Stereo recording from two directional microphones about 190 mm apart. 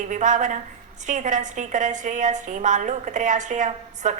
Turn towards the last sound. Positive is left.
turn(degrees=-40)  # may be behind; listen again after turning